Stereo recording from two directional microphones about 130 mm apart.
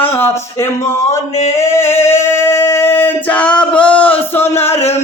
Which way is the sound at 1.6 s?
20° left (ahead or behind).